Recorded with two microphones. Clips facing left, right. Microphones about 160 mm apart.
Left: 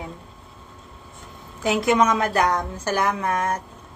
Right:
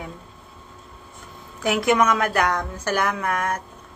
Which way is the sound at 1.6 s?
25° left (ahead or behind).